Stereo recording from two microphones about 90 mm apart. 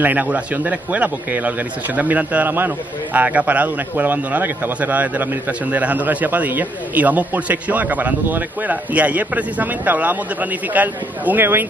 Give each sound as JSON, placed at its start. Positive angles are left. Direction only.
{"t": 0.0, "sound": "a man's voice", "side_deg": -20}